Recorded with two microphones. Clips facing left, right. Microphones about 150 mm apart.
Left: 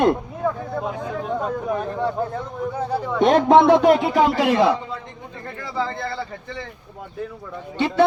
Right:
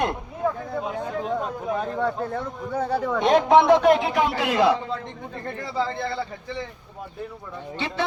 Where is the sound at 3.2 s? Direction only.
50° left (ahead or behind).